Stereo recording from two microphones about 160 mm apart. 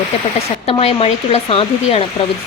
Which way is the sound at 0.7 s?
40° left (ahead or behind).